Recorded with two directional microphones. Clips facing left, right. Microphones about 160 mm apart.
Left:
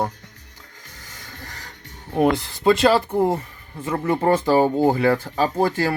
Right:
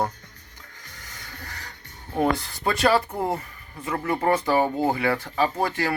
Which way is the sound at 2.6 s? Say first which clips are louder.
Left 5 dB; 20° left (ahead or behind).